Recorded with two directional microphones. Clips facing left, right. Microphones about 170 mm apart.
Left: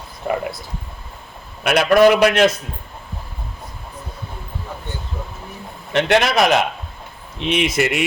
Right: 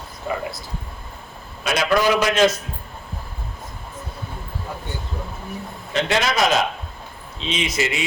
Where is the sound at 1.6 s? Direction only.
60° left (ahead or behind).